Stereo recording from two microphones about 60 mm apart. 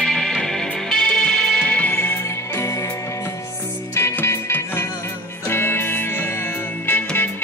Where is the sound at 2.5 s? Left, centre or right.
Left.